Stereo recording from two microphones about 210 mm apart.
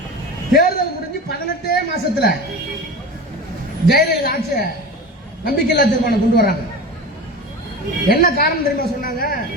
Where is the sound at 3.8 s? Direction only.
45° left (ahead or behind).